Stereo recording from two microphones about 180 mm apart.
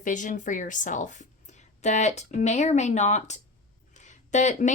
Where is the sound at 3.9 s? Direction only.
40° left (ahead or behind).